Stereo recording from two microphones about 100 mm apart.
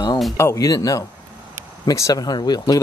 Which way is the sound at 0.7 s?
35° left (ahead or behind).